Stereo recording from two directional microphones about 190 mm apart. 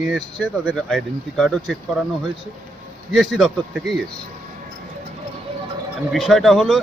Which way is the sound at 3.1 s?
Centre (ahead or behind).